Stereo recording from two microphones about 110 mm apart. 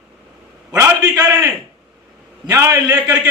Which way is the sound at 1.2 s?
30° right (ahead or behind).